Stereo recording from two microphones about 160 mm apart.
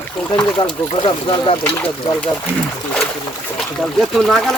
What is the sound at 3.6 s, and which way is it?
Speech, centre (ahead or behind).